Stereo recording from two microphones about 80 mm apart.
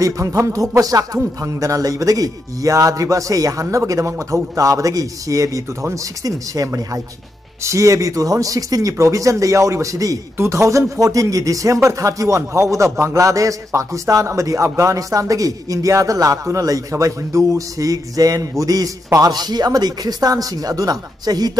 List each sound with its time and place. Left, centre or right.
0.0 s a man's voice: right
19.2 s a man's voice: right